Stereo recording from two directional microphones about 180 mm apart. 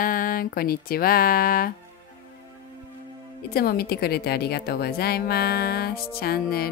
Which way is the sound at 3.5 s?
55° left (ahead or behind).